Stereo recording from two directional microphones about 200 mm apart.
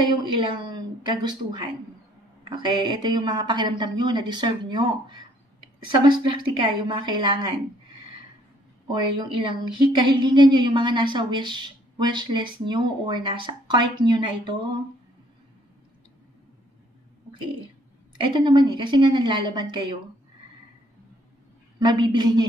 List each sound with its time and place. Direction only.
0.2 s a woman's voice: 25° right (ahead or behind)
18.2 s a woman's voice: 25° right (ahead or behind)
21.7 s a woman's voice: 20° right (ahead or behind)